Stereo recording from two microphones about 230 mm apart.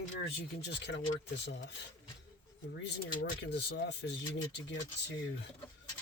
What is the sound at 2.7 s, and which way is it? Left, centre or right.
Speech, left.